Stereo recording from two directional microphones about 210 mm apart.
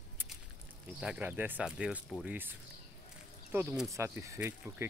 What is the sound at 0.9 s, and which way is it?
Speech, 5° right (ahead or behind).